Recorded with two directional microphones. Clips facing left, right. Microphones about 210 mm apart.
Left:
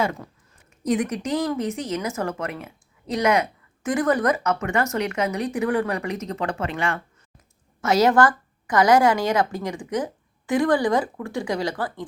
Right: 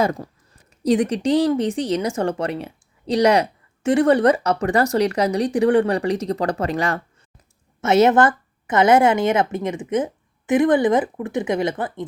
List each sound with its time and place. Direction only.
0.0 s speech: 40° right (ahead or behind)
7.8 s a woman's voice: 25° right (ahead or behind)